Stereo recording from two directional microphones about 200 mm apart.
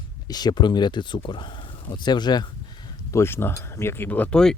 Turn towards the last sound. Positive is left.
turn(degrees=5)  # may be behind; listen again after turning